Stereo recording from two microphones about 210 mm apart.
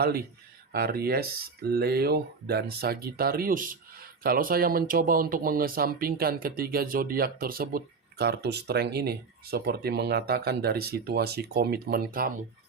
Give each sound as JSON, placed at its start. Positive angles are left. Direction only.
{"t": 0.0, "sound": "speech", "side_deg": -45}